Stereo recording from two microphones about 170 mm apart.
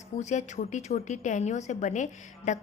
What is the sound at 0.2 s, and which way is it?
A woman's voice, 45° left (ahead or behind).